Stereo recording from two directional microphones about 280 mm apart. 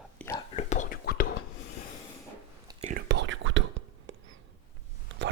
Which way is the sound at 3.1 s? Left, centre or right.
Right.